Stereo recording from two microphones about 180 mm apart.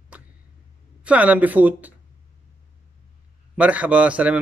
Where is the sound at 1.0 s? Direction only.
10° right (ahead or behind).